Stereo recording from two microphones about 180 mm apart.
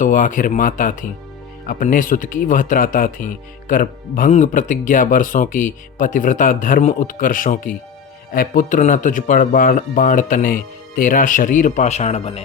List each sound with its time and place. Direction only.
0.0 s speech: 45° left (ahead or behind)